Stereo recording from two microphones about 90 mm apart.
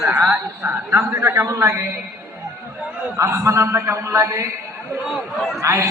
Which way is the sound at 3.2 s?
35° right (ahead or behind).